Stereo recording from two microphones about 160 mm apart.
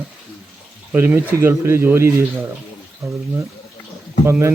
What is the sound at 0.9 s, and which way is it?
Speech, 15° right (ahead or behind).